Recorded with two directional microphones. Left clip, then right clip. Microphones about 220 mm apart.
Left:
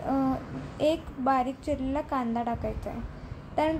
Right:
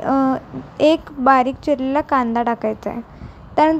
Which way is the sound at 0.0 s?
30° right (ahead or behind).